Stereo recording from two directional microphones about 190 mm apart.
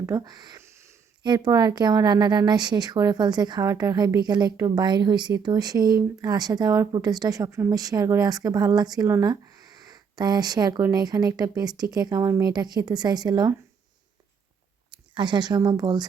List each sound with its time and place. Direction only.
0.0 s a sound: 20° right (ahead or behind)
1.5 s a woman's voice: 20° right (ahead or behind)
14.8 s speech: 25° right (ahead or behind)